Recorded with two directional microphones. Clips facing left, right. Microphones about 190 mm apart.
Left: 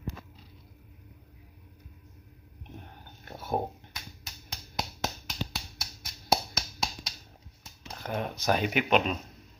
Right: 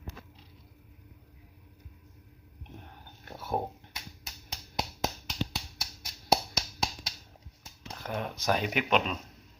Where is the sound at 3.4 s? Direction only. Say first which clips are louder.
Left 2 dB; 20° left (ahead or behind).